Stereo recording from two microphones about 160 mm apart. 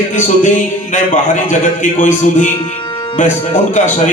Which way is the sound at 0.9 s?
50° left (ahead or behind).